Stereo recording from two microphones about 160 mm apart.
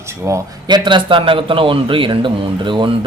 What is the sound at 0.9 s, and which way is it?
A man's voice, 30° right (ahead or behind).